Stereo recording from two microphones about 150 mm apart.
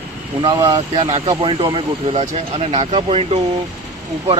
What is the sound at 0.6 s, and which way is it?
Speech, 40° right (ahead or behind).